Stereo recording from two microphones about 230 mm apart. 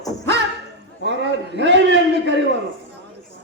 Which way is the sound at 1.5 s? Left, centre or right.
Right.